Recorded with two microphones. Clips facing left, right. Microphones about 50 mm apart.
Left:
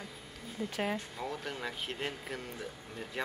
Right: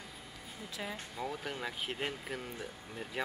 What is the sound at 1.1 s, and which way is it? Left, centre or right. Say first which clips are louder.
Speech: even; centre.